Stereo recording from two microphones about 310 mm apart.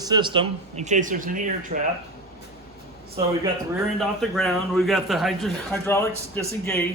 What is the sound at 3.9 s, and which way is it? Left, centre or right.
A man's voice, centre.